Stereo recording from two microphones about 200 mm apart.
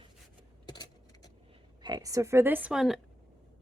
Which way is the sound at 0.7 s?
20° left (ahead or behind).